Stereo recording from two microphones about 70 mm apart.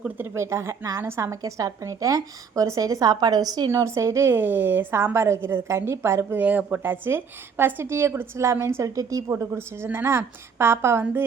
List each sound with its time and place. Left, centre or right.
0.2 s a woman's voice: right
3.7 s a woman's voice: right
4.3 s a woman's voice: right
6.4 s a woman's voice: right
9.5 s a woman's voice: right